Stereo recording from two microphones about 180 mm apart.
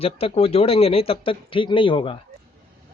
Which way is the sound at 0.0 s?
35° left (ahead or behind).